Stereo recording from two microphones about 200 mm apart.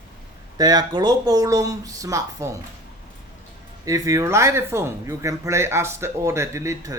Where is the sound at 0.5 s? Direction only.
20° right (ahead or behind).